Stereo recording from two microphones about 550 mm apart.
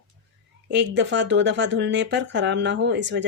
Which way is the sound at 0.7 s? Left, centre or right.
Centre.